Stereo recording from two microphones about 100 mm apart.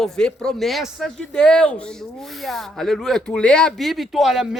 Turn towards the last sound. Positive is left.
turn(degrees=-5)  # may be behind; listen again after turning